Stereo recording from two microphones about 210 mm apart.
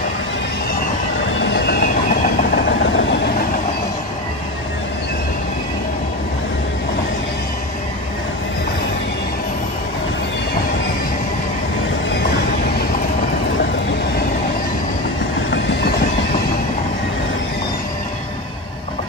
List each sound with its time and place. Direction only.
1.4 s train: 55° left (ahead or behind)